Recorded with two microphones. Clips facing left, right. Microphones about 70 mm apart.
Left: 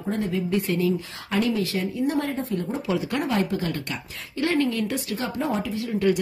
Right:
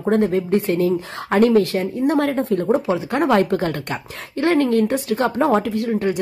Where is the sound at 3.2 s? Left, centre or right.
Right.